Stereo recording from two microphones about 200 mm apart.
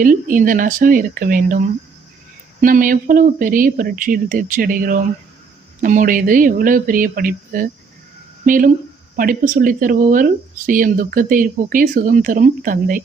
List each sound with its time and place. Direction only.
0.0 s speech: 40° right (ahead or behind)